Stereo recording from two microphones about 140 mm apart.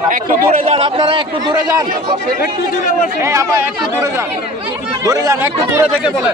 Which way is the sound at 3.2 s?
20° right (ahead or behind).